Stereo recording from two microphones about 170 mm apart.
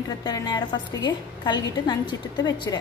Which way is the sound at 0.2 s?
25° left (ahead or behind).